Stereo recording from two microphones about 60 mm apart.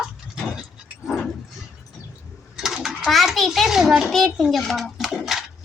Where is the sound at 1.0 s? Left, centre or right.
Centre.